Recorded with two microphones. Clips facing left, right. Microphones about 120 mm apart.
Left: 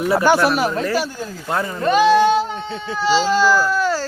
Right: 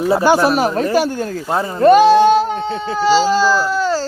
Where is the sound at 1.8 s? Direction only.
40° right (ahead or behind).